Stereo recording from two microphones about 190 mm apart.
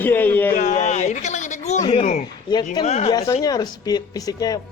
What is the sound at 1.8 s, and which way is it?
Speech, 25° left (ahead or behind).